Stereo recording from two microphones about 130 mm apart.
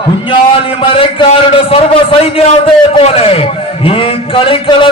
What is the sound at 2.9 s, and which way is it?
A man's voice, 50° left (ahead or behind).